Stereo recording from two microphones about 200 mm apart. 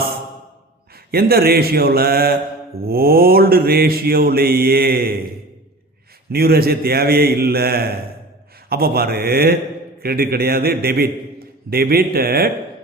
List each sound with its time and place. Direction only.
1.1 s mantra: 50° right (ahead or behind)
6.3 s mantra: 50° right (ahead or behind)